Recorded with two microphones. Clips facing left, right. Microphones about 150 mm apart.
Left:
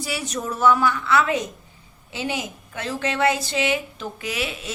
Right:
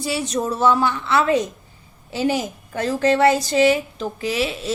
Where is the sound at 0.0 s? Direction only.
30° right (ahead or behind).